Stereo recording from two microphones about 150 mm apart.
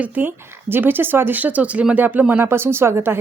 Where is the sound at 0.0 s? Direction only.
10° right (ahead or behind).